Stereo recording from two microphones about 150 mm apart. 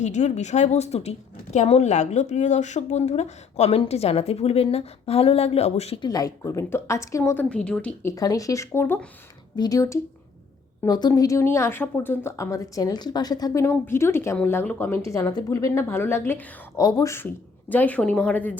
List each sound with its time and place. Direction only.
0.0 s speech: 50° left (ahead or behind)
6.0 s a woman's voice: 25° left (ahead or behind); by 7.9 s 5° left (ahead or behind)
8.0 s a woman's voice: 25° left (ahead or behind)
17.7 s a woman's voice: 10° left (ahead or behind)